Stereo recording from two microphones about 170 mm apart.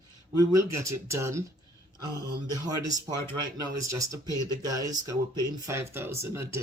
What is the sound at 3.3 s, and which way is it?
Speech, 20° right (ahead or behind).